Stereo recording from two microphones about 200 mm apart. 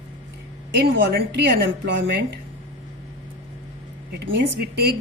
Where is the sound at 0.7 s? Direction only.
60° right (ahead or behind).